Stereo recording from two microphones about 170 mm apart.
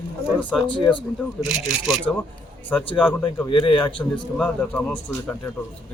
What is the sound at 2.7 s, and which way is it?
Speech, 10° left (ahead or behind).